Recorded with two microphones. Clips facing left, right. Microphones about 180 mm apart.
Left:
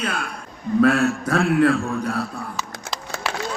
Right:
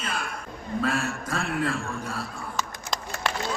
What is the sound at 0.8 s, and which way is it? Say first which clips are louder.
A man's voice: left 11 dB; 65° left (ahead or behind).